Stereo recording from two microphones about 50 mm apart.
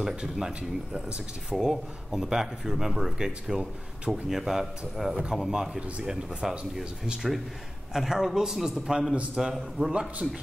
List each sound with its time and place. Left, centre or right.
0.0 s a man's voice: centre
7.9 s speech: centre
9.1 s a man's voice: right
9.4 s a man's voice: centre